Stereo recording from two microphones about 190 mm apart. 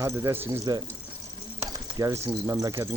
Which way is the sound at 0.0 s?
15° right (ahead or behind).